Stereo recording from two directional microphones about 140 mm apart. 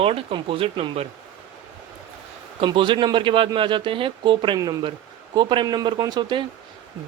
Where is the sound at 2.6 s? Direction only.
35° right (ahead or behind).